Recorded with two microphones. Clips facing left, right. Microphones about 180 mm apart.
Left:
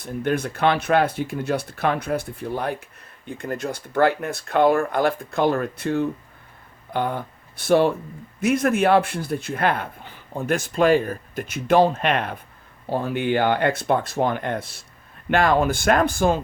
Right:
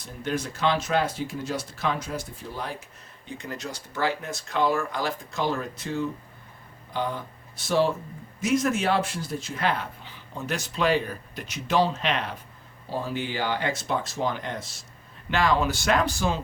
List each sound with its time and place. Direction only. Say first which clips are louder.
0.0 s speech: left 6 dB; 55° left (ahead or behind)